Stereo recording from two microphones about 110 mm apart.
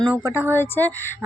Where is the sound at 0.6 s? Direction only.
20° left (ahead or behind).